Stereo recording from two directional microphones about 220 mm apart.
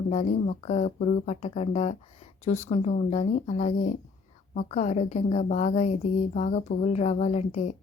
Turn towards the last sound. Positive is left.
turn(degrees=30)  # may be behind; listen again after turning